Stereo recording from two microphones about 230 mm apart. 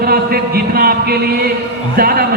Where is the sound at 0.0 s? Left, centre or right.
Right.